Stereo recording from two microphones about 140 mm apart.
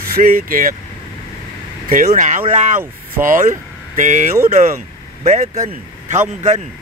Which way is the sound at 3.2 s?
70° right (ahead or behind).